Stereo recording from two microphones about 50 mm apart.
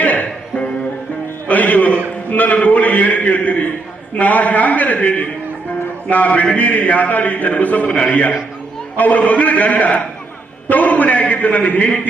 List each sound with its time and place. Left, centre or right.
0.0 s music: left
2.3 s a man's voice: left